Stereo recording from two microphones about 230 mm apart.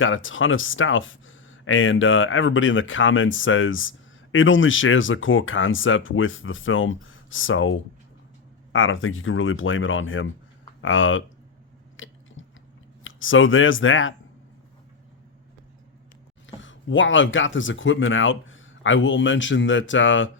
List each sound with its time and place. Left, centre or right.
0.0 s speech: left
11.9 s chewing: left
13.1 s speech: left
16.6 s speech: left